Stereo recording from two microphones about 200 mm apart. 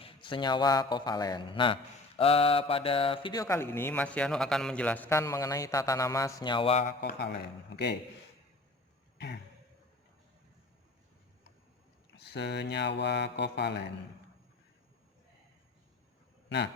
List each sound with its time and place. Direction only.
0.0 s a man's voice: 25° left (ahead or behind)
7.2 s speech: 55° left (ahead or behind)
9.1 s a sound: 55° left (ahead or behind)
12.1 s speech: 55° left (ahead or behind)